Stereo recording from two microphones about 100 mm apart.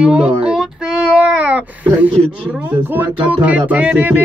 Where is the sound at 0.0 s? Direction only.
10° right (ahead or behind).